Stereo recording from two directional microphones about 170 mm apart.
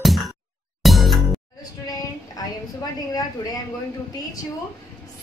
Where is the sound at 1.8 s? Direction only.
20° left (ahead or behind).